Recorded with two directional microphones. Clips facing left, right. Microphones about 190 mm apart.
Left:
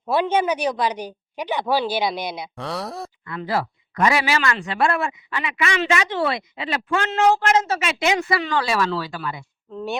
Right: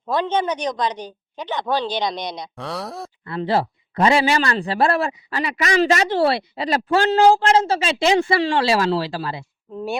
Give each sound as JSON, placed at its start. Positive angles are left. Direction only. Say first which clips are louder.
{"t": 0.0, "sound": "a woman's voice", "louder": "left 1 dB", "side_deg": 10}
{"t": 3.2, "sound": "speech", "louder": "right 4 dB", "side_deg": -30}
{"t": 9.7, "sound": "speech", "louder": "right 1 dB", "side_deg": -10}